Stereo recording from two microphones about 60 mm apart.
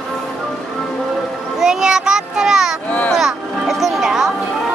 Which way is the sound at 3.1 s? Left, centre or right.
Centre.